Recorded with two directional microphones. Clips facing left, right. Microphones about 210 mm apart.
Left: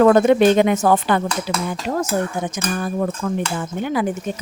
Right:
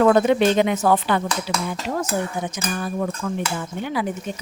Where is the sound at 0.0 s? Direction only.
50° left (ahead or behind).